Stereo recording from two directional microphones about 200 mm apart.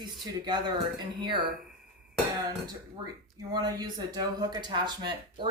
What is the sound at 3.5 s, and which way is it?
Speech, 20° right (ahead or behind).